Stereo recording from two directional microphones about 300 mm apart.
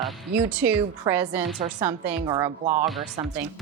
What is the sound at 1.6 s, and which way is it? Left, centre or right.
A woman's voice, centre.